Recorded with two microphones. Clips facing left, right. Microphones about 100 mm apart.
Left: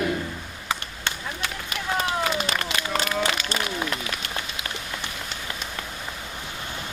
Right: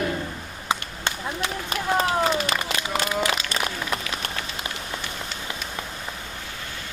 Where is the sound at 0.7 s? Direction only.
20° right (ahead or behind).